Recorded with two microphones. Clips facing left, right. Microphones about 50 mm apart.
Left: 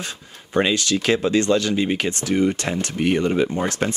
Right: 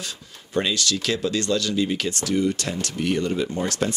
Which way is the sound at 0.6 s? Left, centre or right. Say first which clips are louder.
Left 4 dB; left.